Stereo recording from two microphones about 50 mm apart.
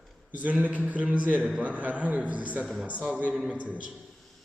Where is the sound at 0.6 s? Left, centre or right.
Right.